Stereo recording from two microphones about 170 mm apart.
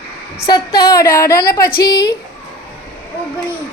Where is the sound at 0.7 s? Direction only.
65° left (ahead or behind).